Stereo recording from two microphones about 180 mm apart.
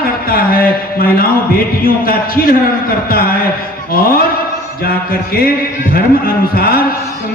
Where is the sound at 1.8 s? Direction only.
55° left (ahead or behind).